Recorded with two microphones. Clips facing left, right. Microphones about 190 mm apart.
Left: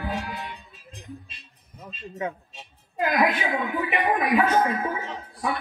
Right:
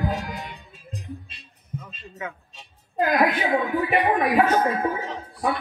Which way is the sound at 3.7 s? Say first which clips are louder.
Right 1 dB; 50° right (ahead or behind).